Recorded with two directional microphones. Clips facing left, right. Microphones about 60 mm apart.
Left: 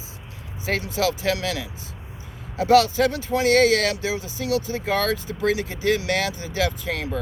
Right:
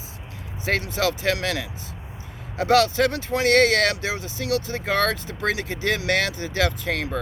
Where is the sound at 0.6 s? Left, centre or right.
Right.